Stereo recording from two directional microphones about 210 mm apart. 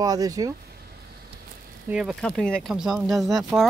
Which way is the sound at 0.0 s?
15° right (ahead or behind).